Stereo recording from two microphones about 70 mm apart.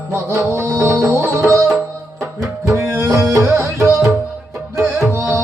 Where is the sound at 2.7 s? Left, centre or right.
Right.